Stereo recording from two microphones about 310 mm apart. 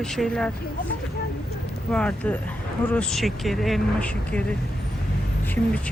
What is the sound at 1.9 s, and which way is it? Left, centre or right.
Speech, centre.